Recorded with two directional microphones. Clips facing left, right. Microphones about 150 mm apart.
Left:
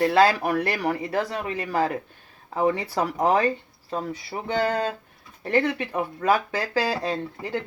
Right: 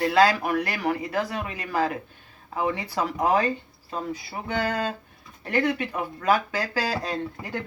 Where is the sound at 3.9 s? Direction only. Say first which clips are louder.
Left 2 dB; 35° left (ahead or behind).